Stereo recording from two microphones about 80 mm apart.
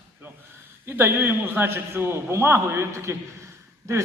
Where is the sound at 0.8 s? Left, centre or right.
Right.